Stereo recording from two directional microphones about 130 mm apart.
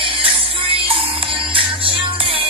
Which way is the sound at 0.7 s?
45° right (ahead or behind).